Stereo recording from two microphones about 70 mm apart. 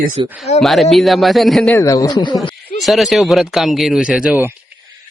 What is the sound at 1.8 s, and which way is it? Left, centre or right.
Speech, left.